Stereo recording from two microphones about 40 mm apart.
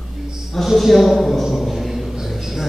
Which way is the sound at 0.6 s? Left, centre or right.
Centre.